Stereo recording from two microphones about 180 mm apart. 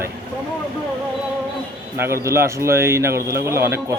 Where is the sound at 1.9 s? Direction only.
15° right (ahead or behind).